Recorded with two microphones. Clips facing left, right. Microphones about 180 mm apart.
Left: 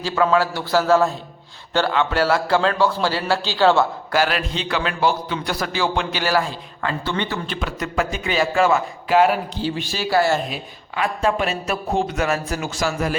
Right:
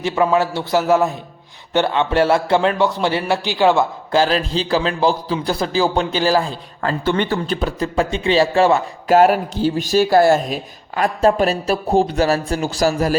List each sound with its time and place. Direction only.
0.0 s a man's voice: 20° right (ahead or behind)
4.2 s a man's voice: 30° right (ahead or behind)
7.0 s a man's voice: 50° right (ahead or behind)